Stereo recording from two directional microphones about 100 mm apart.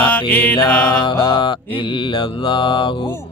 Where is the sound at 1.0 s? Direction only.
55° left (ahead or behind).